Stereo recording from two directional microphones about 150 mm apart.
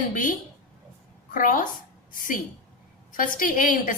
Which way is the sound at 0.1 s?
65° left (ahead or behind).